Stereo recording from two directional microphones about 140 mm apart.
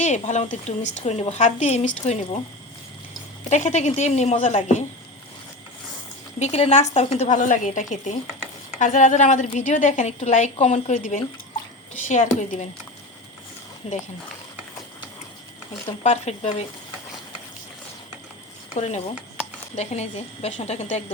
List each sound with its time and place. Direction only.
0.0 s a woman's voice: 55° left (ahead or behind)
3.5 s a woman's voice: 55° left (ahead or behind)
6.4 s a woman's voice: 50° left (ahead or behind)
13.8 s speech: 45° left (ahead or behind)
16.0 s speech: 50° left (ahead or behind)
18.7 s speech: 55° left (ahead or behind)